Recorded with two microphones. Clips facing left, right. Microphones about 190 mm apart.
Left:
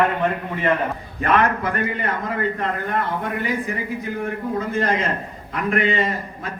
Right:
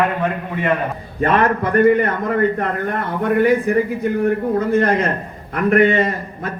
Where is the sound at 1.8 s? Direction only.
55° right (ahead or behind).